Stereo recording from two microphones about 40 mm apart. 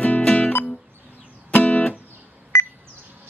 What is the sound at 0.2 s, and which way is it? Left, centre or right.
Music, left.